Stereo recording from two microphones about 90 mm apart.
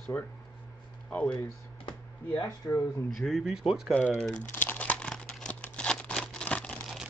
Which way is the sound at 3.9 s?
15° left (ahead or behind).